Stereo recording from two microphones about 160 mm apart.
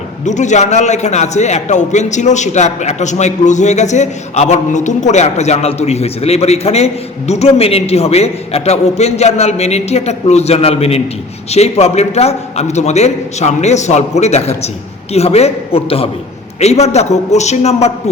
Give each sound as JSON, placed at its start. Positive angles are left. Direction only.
{"t": 0.3, "sound": "a man's voice", "side_deg": 50}